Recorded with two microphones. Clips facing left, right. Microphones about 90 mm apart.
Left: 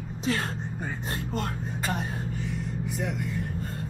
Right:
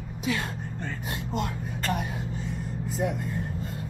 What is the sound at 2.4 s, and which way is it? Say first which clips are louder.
Vehicle: left 1 dB; 65° left (ahead or behind).